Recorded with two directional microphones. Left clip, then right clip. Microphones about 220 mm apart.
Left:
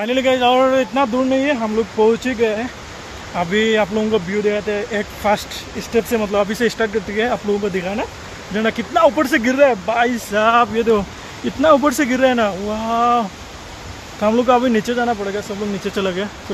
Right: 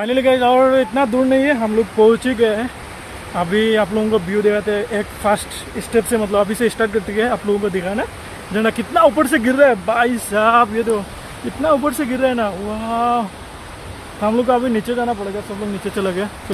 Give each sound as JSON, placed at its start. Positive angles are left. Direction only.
{"t": 0.0, "sound": "speech", "side_deg": 0}
{"t": 3.3, "sound": "speech", "side_deg": 0}
{"t": 11.6, "sound": "speech", "side_deg": 40}
{"t": 14.2, "sound": "speech", "side_deg": 30}
{"t": 16.0, "sound": "speech", "side_deg": 5}